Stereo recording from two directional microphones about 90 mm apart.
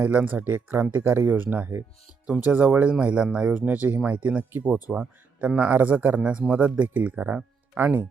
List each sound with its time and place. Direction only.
0.0 s speech: 15° right (ahead or behind)